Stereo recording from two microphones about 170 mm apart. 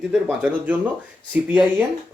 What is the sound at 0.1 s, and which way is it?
Speech, 10° right (ahead or behind).